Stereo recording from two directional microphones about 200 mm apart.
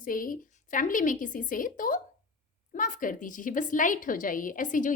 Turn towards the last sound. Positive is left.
turn(degrees=40)  # may be behind; listen again after turning